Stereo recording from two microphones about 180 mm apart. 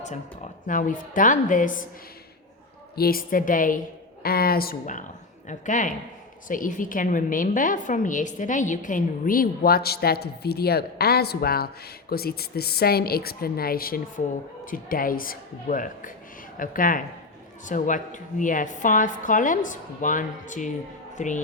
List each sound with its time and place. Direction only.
0.0 s a woman's voice: 40° left (ahead or behind)
2.9 s a woman's voice: 55° left (ahead or behind)